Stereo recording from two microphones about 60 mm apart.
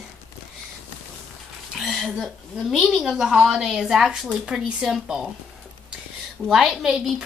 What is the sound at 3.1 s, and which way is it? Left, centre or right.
A woman's voice, centre.